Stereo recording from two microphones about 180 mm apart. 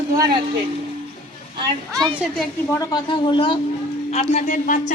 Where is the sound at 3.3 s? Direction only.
25° left (ahead or behind).